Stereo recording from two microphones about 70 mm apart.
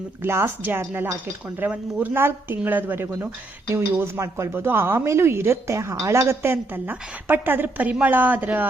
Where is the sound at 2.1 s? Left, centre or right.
Right.